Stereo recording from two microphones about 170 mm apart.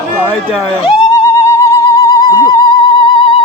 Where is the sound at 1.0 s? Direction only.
20° left (ahead or behind).